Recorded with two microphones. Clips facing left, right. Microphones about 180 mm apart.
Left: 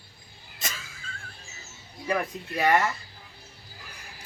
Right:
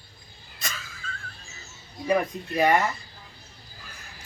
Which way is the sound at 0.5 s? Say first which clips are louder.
Right 1 dB; 25° left (ahead or behind).